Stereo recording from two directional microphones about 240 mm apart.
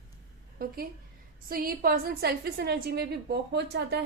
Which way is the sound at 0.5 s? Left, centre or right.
Right.